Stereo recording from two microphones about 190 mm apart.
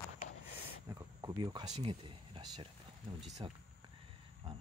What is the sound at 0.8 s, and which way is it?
Speech, 20° right (ahead or behind).